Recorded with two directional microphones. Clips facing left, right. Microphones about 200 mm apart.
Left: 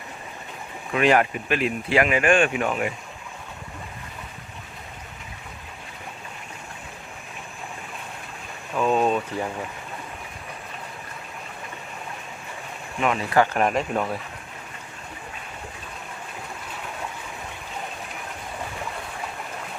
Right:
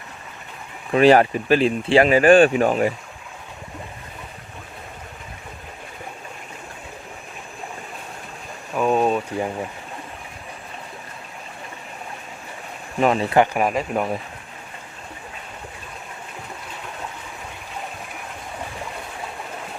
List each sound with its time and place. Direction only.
0.9 s speech: 35° right (ahead or behind)
8.7 s speech: 10° right (ahead or behind)
13.0 s speech: 35° right (ahead or behind)
13.3 s speech: 20° right (ahead or behind)
13.6 s speech: 5° right (ahead or behind)